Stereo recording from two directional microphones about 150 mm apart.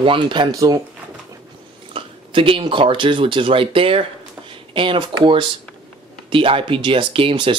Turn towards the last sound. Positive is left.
turn(degrees=-35)  # may be behind; listen again after turning